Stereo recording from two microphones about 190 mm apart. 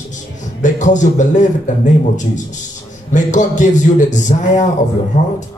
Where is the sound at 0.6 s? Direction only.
40° left (ahead or behind).